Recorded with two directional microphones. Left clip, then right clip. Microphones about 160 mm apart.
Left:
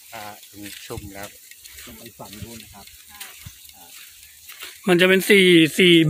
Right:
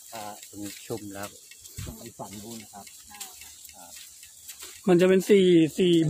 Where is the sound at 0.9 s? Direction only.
90° right.